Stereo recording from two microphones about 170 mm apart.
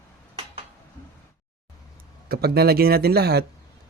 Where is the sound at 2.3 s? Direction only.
70° right (ahead or behind).